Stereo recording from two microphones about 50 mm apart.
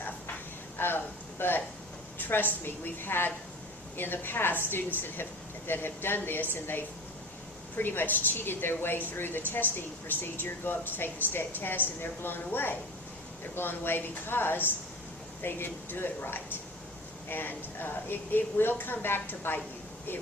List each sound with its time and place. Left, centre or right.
0.8 s speech: left